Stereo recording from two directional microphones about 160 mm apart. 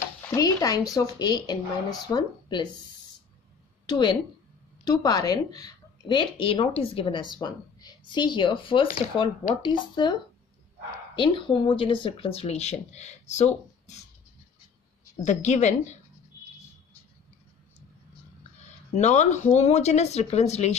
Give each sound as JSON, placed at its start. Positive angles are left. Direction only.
{"t": 0.3, "sound": "speech", "side_deg": 20}
{"t": 3.8, "sound": "a woman's voice", "side_deg": 25}
{"t": 11.1, "sound": "speech", "side_deg": 30}
{"t": 15.2, "sound": "speech", "side_deg": 45}
{"t": 18.6, "sound": "speech", "side_deg": 45}